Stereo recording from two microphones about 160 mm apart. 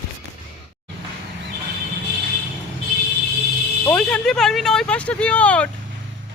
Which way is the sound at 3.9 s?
5° left (ahead or behind).